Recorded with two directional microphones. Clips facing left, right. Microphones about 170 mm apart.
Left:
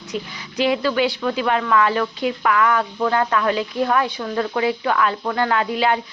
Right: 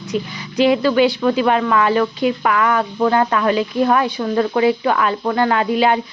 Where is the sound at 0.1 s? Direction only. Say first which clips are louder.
Right 6 dB; 20° right (ahead or behind).